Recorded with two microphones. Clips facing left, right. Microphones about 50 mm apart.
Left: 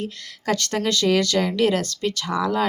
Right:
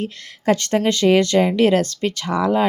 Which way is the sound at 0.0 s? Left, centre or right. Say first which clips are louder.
Right 6 dB; right.